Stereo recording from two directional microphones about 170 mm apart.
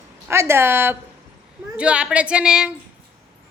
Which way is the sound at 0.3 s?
15° right (ahead or behind).